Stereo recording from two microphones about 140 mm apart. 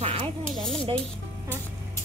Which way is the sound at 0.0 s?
45° right (ahead or behind).